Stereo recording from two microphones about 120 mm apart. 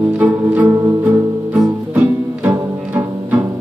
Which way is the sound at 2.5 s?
25° right (ahead or behind).